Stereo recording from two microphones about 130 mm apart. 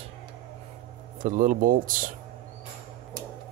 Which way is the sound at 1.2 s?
85° right.